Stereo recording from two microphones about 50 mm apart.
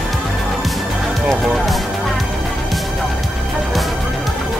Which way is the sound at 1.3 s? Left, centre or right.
Centre.